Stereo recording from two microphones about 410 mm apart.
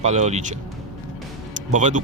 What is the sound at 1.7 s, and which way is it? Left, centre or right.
Speech, centre.